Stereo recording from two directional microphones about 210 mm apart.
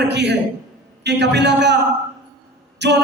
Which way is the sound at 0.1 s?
55° right (ahead or behind).